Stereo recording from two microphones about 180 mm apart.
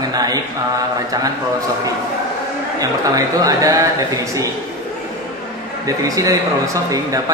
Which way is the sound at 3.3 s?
20° right (ahead or behind).